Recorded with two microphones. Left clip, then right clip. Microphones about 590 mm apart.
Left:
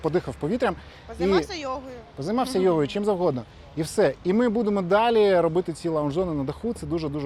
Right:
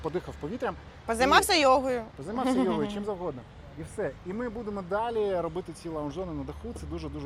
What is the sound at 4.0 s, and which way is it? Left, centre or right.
Speech, left.